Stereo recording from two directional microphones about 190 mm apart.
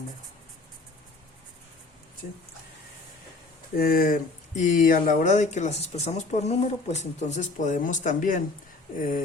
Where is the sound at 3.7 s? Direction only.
50° left (ahead or behind).